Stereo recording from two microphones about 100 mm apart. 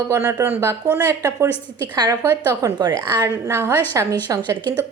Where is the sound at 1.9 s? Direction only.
50° right (ahead or behind).